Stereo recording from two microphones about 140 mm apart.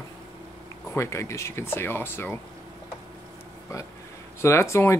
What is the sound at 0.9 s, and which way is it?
Speech, 20° left (ahead or behind).